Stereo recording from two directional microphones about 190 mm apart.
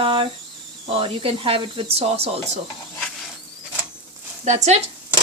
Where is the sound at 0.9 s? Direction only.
30° right (ahead or behind).